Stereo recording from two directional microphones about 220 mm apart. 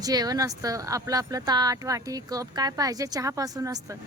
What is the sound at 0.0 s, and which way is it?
Speech, 15° right (ahead or behind).